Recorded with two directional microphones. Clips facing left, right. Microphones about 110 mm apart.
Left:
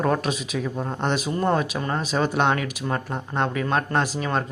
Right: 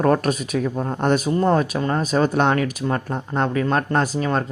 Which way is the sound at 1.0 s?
45° right (ahead or behind).